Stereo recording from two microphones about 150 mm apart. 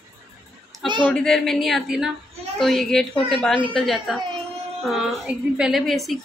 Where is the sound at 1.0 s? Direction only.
5° left (ahead or behind).